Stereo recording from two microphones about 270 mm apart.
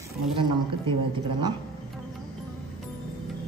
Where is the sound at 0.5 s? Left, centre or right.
Centre.